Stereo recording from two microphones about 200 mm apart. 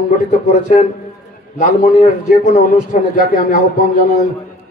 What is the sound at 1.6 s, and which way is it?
A man's voice, 40° left (ahead or behind).